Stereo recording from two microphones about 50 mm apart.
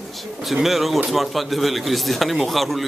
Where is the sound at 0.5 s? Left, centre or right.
Centre.